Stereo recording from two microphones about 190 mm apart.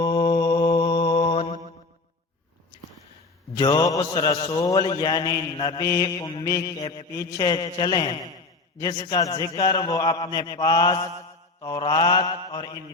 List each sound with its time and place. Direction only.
0.0 s mantra: 25° left (ahead or behind)
3.6 s mantra: 20° left (ahead or behind)